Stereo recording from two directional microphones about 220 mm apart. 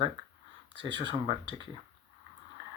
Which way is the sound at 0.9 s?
55° right (ahead or behind).